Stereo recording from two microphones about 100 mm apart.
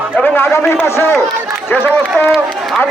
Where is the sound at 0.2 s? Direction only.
20° left (ahead or behind).